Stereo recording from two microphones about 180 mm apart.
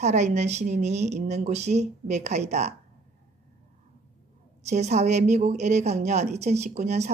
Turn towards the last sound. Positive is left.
turn(degrees=-40)  # may be behind; listen again after turning